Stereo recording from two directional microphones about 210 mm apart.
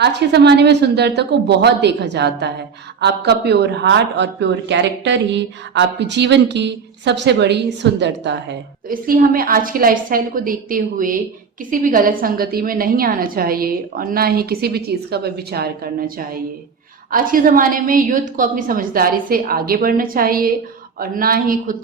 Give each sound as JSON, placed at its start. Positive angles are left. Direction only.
{"t": 0.0, "sound": "a woman's voice", "side_deg": -55}
{"t": 8.9, "sound": "a woman's voice", "side_deg": -40}